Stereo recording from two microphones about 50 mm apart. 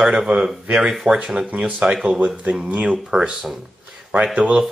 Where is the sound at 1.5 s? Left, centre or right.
Right.